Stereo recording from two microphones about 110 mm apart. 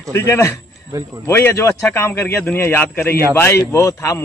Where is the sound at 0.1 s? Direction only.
25° left (ahead or behind).